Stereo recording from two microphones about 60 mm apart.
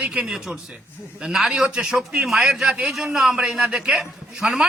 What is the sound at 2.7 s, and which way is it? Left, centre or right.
A man's voice, centre.